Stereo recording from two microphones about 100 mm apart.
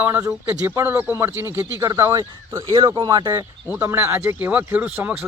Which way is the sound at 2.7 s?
55° right (ahead or behind).